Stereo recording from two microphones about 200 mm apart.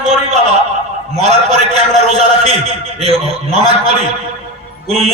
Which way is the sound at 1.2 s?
30° right (ahead or behind).